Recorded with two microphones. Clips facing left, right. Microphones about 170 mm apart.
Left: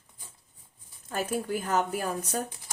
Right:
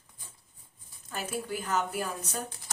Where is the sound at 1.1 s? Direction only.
45° left (ahead or behind).